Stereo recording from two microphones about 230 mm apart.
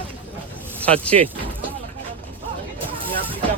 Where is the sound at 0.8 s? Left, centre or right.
Centre.